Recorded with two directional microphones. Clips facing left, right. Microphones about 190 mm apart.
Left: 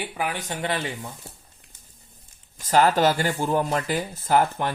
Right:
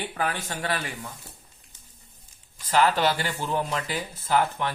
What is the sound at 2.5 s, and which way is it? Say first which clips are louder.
Speech: left 3 dB; 45° left (ahead or behind).